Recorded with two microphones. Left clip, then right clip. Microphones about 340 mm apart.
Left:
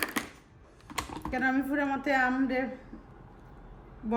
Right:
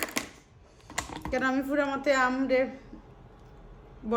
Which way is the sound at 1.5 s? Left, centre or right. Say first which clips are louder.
Right 2 dB; centre.